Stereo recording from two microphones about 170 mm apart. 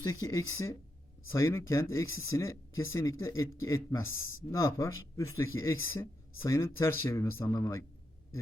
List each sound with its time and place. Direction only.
0.0 s speech: 20° left (ahead or behind)